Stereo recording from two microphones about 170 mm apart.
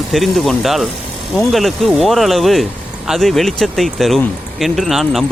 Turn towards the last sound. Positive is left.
turn(degrees=0)  # may be behind; listen again after turning